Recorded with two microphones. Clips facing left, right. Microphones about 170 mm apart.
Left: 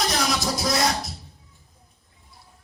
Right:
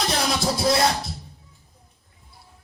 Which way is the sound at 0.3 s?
30° right (ahead or behind).